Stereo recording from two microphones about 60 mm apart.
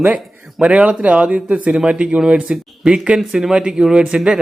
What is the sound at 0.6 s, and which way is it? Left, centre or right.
Speech, right.